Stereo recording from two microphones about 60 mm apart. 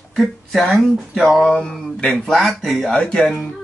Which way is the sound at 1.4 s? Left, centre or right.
Centre.